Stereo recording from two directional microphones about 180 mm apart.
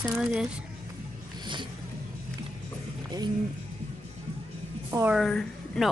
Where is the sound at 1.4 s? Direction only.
25° right (ahead or behind).